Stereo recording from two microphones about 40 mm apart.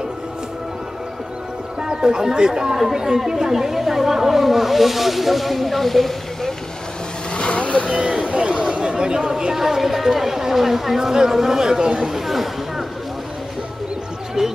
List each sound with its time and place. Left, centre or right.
1.8 s speech: centre
7.3 s vehicle: left
7.9 s speech: centre
8.3 s chatter: right
9.5 s speech: centre
12.0 s speech: centre